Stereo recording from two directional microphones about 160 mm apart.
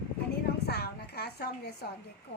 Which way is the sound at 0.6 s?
90° left.